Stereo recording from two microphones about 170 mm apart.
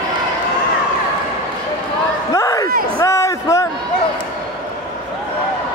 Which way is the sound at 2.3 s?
20° left (ahead or behind).